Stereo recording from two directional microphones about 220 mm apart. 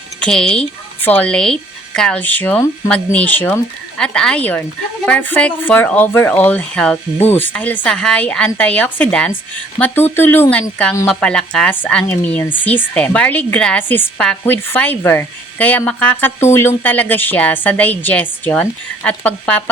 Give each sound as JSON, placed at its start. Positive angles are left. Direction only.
{"t": 0.2, "sound": "speech", "side_deg": 5}